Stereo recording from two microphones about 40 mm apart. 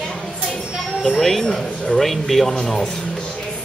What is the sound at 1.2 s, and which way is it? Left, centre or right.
Speech, centre.